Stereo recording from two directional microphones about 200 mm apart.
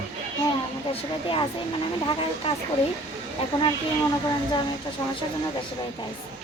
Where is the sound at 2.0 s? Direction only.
25° left (ahead or behind).